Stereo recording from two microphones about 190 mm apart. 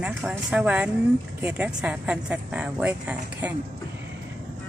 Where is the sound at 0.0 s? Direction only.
5° right (ahead or behind).